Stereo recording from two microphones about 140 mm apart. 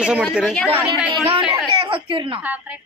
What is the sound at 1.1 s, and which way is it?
A woman's voice, 40° right (ahead or behind).